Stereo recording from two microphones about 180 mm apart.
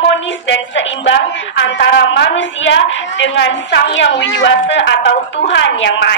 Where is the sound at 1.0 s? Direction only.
90° left.